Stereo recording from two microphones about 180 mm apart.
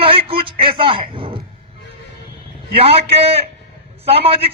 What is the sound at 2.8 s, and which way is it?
A man's voice, 35° right (ahead or behind).